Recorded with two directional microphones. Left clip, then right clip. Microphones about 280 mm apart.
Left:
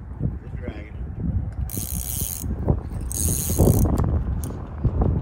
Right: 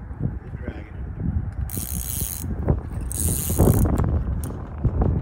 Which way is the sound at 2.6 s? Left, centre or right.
Left.